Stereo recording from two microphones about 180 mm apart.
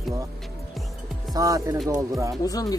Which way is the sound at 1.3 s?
20° right (ahead or behind).